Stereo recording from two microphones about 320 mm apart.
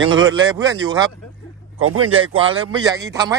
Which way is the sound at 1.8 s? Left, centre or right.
Right.